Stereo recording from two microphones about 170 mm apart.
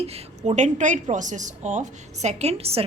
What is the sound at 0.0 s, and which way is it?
A woman's voice, 35° right (ahead or behind).